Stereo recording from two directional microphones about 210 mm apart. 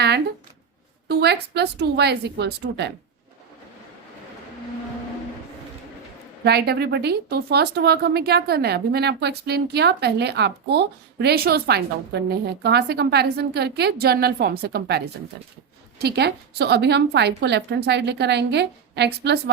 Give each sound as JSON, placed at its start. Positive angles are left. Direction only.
{"t": 1.0, "sound": "speech", "side_deg": -50}
{"t": 6.4, "sound": "speech", "side_deg": -50}